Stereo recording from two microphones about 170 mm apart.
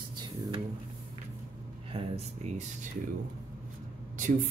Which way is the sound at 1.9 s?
35° right (ahead or behind).